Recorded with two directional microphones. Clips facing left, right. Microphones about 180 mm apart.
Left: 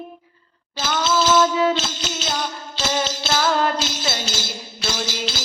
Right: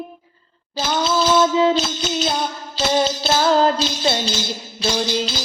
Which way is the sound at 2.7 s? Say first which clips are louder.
Right 6 dB; 35° right (ahead or behind).